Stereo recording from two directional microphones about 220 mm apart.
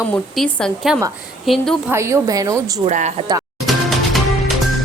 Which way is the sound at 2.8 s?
30° right (ahead or behind).